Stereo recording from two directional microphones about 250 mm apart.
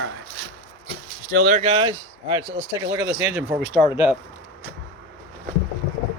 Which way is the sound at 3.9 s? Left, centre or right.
Centre.